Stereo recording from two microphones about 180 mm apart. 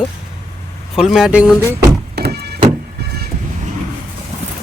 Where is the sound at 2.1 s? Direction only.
65° right (ahead or behind).